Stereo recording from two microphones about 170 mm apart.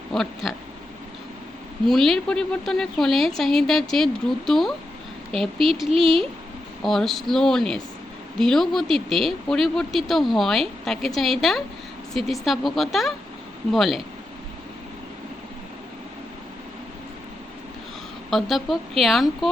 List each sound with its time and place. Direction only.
0.1 s speech: centre (ahead or behind)
1.9 s speech: centre (ahead or behind)
5.3 s speech: 30° right (ahead or behind)
6.8 s speech: centre (ahead or behind)
18.3 s speech: centre (ahead or behind)